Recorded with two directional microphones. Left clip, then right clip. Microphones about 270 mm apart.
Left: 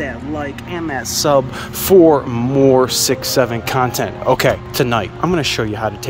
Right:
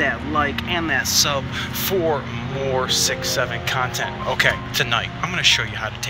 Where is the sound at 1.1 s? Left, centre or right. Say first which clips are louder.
Left 6 dB; left.